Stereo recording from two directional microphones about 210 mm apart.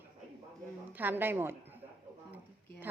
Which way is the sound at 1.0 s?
10° right (ahead or behind).